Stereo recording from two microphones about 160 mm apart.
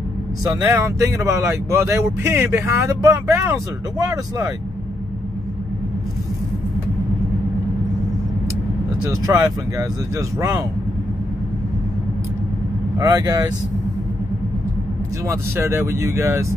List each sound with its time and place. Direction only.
0.4 s speech: 20° right (ahead or behind)
9.3 s speech: 15° right (ahead or behind)
13.0 s speech: 20° right (ahead or behind)
15.2 s speech: 15° right (ahead or behind)